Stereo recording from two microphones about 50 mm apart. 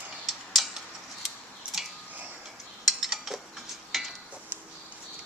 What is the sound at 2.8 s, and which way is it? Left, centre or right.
Cutlery, centre.